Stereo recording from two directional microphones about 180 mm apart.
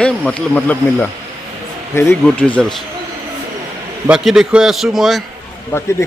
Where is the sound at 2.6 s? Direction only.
5° left (ahead or behind).